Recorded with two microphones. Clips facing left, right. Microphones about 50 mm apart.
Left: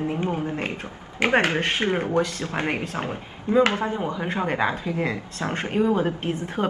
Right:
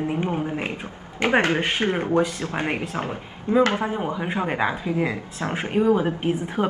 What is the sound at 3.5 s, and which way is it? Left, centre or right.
Speech, right.